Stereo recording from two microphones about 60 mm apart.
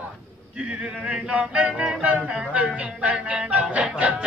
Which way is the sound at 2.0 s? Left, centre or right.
Right.